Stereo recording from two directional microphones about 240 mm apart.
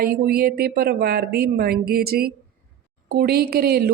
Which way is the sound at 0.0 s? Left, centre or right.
Right.